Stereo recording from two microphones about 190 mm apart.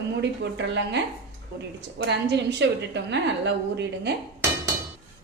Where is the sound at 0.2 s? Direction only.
65° right (ahead or behind).